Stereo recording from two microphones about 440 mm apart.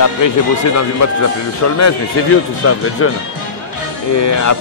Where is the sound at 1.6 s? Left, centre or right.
Left.